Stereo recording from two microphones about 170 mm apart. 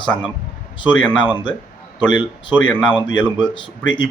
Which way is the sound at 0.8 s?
30° left (ahead or behind).